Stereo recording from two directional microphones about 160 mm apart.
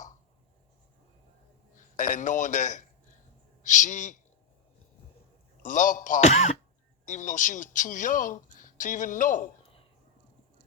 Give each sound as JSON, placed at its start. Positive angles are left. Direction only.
{"t": 1.7, "sound": "a man's voice", "side_deg": 50}
{"t": 5.6, "sound": "speech", "side_deg": 55}